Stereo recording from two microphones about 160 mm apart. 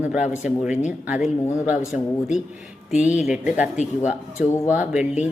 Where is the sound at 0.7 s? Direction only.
50° left (ahead or behind).